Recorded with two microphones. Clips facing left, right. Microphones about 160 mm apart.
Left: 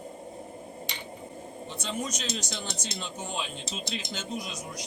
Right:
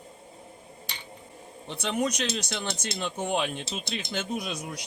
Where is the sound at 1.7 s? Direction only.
65° right (ahead or behind).